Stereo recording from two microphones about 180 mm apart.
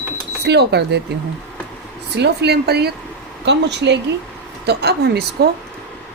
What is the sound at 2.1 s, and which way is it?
Speech, 65° right (ahead or behind).